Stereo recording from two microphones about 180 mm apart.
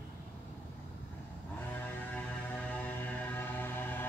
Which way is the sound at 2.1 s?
10° left (ahead or behind).